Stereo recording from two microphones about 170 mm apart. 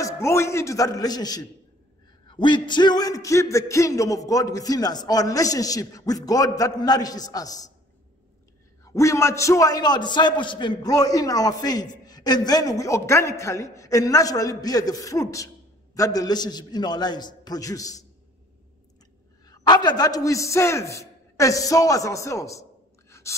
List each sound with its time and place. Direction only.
0.0 s a man's voice: 15° left (ahead or behind)
8.8 s a man's voice: 20° left (ahead or behind)
19.4 s a man's voice: 20° left (ahead or behind)